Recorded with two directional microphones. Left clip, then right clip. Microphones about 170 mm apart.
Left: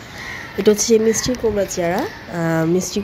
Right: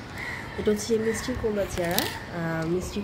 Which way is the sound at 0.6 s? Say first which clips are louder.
Left 11 dB; 50° left (ahead or behind).